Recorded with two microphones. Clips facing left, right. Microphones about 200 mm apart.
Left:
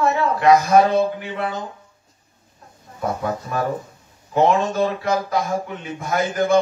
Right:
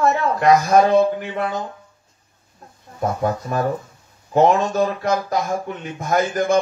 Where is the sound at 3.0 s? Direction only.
40° right (ahead or behind).